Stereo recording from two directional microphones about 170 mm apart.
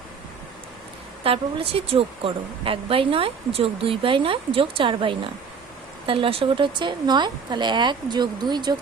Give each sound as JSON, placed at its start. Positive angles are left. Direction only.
{"t": 1.2, "sound": "speech", "side_deg": -35}